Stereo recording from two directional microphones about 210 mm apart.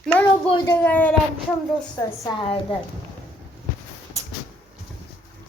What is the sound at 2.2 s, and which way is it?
Speech, 25° left (ahead or behind).